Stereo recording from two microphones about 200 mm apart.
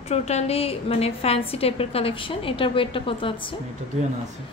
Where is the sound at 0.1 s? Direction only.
35° left (ahead or behind).